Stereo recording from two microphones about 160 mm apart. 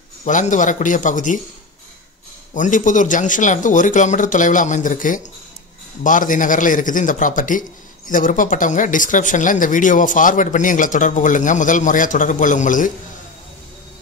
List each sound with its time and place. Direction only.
0.2 s speech: 50° left (ahead or behind)
2.5 s a man's voice: 55° left (ahead or behind)